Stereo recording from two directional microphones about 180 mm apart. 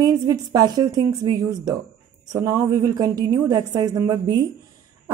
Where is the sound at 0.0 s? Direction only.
20° right (ahead or behind).